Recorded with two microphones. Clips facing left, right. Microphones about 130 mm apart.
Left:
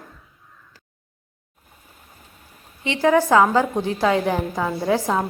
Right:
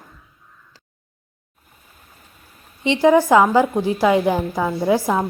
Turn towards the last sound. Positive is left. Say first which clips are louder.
# right 3 dB
turn(degrees=-10)  # may be behind; listen again after turning